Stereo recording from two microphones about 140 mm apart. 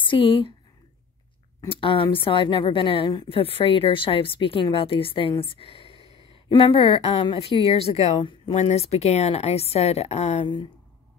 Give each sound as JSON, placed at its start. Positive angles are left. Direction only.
{"t": 0.0, "sound": "speech", "side_deg": 40}
{"t": 1.7, "sound": "a woman's voice", "side_deg": 40}
{"t": 8.5, "sound": "a woman's voice", "side_deg": 50}